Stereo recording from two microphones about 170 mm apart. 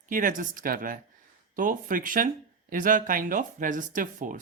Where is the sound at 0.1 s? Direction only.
50° right (ahead or behind).